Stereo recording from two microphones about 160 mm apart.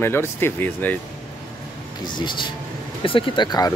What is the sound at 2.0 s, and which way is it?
Speech, 30° left (ahead or behind).